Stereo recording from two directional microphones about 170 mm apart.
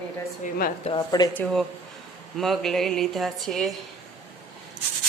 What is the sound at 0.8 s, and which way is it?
Speech, 30° left (ahead or behind).